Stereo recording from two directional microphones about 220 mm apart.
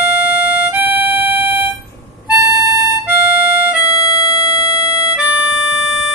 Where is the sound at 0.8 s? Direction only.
5° right (ahead or behind).